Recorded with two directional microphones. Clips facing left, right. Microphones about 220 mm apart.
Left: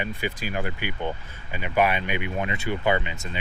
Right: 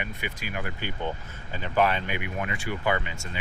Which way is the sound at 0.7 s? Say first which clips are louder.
Left 2 dB; 15° left (ahead or behind).